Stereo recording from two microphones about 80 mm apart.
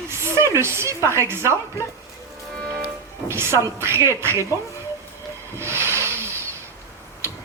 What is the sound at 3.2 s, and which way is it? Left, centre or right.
Speech, right.